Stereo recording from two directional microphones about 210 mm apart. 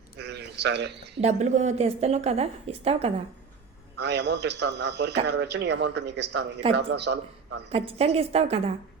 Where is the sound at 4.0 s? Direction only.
55° right (ahead or behind).